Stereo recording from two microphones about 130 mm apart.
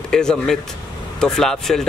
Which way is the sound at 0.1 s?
5° left (ahead or behind).